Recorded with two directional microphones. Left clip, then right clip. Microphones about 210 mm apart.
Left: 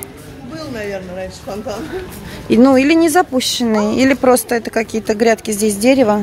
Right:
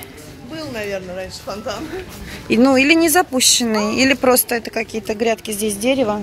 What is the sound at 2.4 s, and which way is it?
A woman's voice, 5° left (ahead or behind).